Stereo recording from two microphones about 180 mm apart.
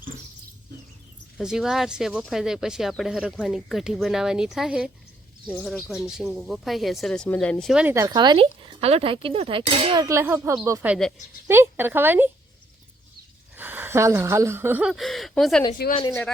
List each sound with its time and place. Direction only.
1.4 s speech: 5° right (ahead or behind)
7.9 s speech: 25° right (ahead or behind)
10.0 s speech: 15° right (ahead or behind)
13.6 s speech: 10° right (ahead or behind)